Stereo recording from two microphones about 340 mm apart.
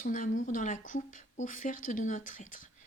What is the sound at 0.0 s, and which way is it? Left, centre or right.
Speech, left.